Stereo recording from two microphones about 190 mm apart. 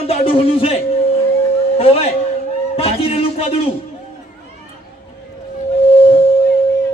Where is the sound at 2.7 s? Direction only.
30° left (ahead or behind).